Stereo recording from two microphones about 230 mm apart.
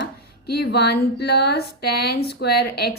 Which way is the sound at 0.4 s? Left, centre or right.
Left.